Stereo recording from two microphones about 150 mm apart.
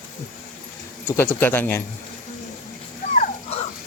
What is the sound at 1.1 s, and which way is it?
Speech, 15° left (ahead or behind).